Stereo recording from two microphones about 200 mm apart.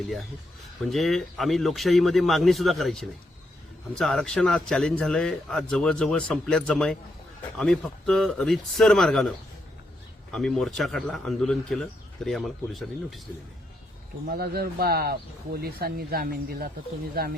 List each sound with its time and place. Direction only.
0.9 s speech: centre (ahead or behind)
10.3 s speech: centre (ahead or behind)
14.3 s speech: 50° right (ahead or behind)